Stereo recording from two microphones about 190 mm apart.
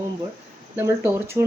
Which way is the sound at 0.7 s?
10° right (ahead or behind).